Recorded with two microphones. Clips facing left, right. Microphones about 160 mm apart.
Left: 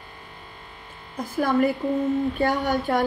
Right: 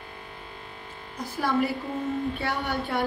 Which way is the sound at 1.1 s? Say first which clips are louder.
Left 4 dB; 50° left (ahead or behind).